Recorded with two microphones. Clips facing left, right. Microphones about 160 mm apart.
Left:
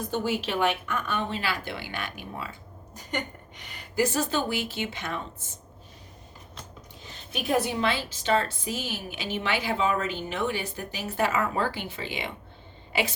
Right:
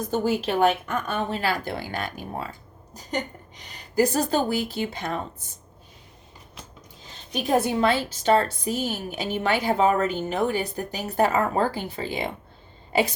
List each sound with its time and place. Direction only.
0.1 s a woman's voice: 40° right (ahead or behind)
7.3 s a woman's voice: 45° right (ahead or behind)